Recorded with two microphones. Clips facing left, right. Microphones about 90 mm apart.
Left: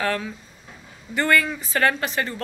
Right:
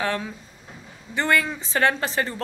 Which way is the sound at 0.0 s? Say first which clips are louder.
Left 1 dB; 20° right (ahead or behind).